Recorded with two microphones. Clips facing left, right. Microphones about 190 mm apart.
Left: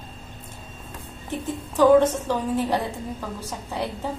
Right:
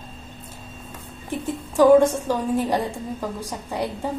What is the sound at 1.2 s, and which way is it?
A woman's voice, 10° right (ahead or behind).